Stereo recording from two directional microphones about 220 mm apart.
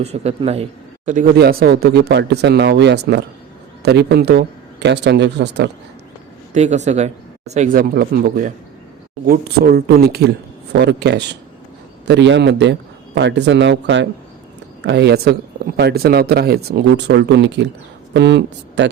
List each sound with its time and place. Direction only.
0.0 s a man's voice: 30° right (ahead or behind)
1.4 s speech: 45° right (ahead or behind)
6.5 s a man's voice: 30° right (ahead or behind); by 18.9 s 50° right (ahead or behind)